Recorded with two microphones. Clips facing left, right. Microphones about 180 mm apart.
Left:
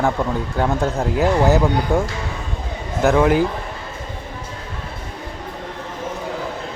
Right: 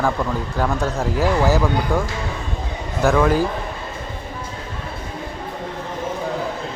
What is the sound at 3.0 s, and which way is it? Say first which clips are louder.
Speech: left 2 dB; 20° left (ahead or behind).